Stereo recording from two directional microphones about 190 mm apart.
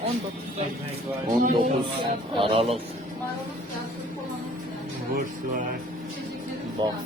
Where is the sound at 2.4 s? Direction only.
30° right (ahead or behind).